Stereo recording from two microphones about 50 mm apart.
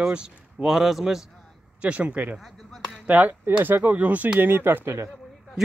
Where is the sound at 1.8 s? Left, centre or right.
Right.